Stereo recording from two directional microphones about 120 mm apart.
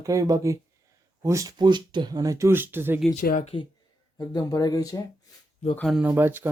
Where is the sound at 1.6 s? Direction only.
40° right (ahead or behind); by 3.0 s 15° right (ahead or behind).